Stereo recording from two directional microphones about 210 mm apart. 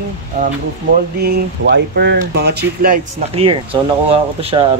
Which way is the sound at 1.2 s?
50° right (ahead or behind).